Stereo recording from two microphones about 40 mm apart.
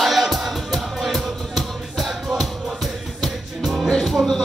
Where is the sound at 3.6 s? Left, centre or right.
Centre.